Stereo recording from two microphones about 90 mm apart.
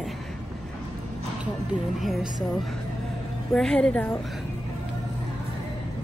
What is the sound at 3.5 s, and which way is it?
Speech, 5° left (ahead or behind).